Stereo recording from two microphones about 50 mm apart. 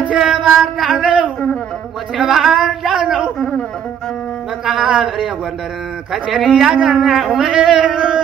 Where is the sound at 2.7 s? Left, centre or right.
Centre.